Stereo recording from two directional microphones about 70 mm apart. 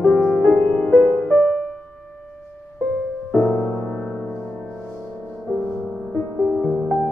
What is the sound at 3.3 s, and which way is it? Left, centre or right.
Music, left.